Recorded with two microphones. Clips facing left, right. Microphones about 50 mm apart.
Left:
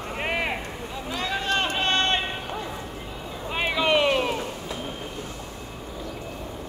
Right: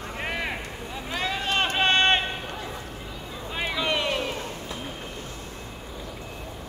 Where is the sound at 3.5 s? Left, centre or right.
Left.